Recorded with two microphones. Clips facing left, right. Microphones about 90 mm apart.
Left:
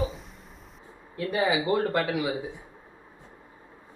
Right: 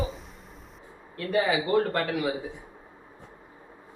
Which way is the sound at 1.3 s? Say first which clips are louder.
Right 1 dB; 15° left (ahead or behind).